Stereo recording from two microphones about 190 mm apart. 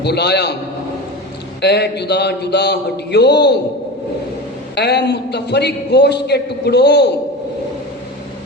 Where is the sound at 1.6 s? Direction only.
60° left (ahead or behind).